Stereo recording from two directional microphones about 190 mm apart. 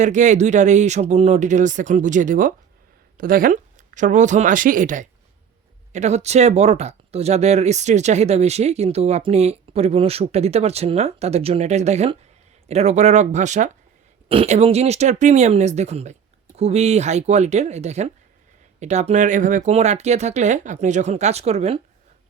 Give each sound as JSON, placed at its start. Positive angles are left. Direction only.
{"t": 0.0, "sound": "speech", "side_deg": -40}